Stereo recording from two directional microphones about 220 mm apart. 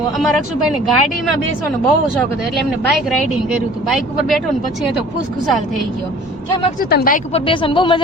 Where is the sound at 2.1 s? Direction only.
Centre (ahead or behind).